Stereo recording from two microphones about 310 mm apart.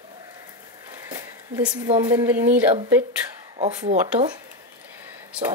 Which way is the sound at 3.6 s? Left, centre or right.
Right.